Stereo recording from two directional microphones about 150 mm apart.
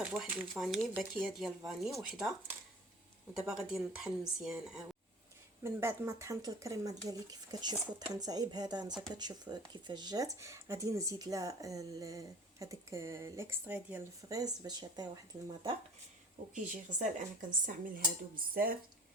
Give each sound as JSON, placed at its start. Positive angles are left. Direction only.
{"t": 0.0, "sound": "speech", "side_deg": -5}
{"t": 3.3, "sound": "speech", "side_deg": -5}
{"t": 5.6, "sound": "speech", "side_deg": -20}
{"t": 8.9, "sound": "speech", "side_deg": -5}
{"t": 9.1, "sound": "speech", "side_deg": -30}
{"t": 14.3, "sound": "speech", "side_deg": -25}
{"t": 16.6, "sound": "a woman's voice", "side_deg": -60}
{"t": 17.7, "sound": "dishes", "side_deg": -70}